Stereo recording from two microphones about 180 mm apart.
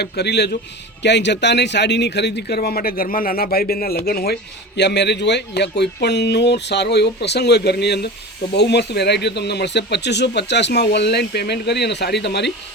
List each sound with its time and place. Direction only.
0.0 s a man's voice: 70° left (ahead or behind)
4.8 s speech: 70° left (ahead or behind)